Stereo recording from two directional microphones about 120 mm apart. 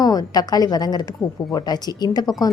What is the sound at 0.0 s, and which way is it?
A woman's voice, 30° left (ahead or behind).